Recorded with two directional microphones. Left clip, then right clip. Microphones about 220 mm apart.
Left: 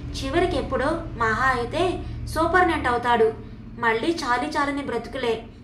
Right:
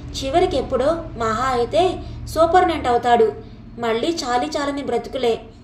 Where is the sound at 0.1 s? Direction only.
55° left (ahead or behind).